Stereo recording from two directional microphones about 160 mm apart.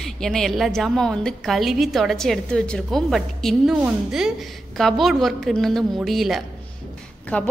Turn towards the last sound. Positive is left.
turn(degrees=10)  # may be behind; listen again after turning